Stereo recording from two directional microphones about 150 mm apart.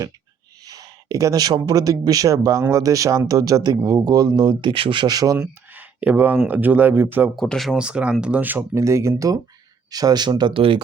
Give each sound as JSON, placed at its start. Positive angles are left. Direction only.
{"t": 0.6, "sound": "speech", "side_deg": -25}
{"t": 5.4, "sound": "speech", "side_deg": -10}
{"t": 7.3, "sound": "speech", "side_deg": 0}